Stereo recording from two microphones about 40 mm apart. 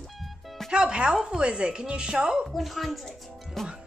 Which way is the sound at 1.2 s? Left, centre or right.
Right.